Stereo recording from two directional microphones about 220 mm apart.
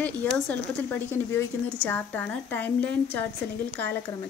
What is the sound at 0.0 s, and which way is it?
A woman's voice, 5° left (ahead or behind).